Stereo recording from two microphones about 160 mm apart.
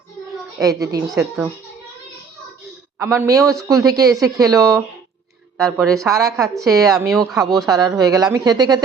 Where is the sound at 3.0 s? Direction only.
15° right (ahead or behind).